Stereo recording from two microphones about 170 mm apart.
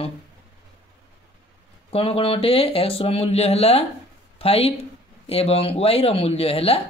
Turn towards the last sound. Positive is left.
turn(degrees=35)  # may be behind; listen again after turning